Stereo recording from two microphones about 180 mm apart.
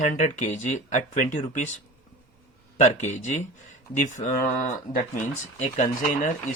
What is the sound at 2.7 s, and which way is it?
Speech, 40° left (ahead or behind).